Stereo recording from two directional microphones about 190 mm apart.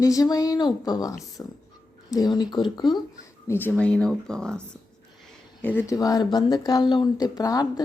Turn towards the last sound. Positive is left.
turn(degrees=20)  # may be behind; listen again after turning